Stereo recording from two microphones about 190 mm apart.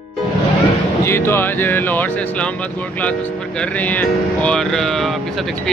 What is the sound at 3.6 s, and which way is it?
Speech, 10° left (ahead or behind).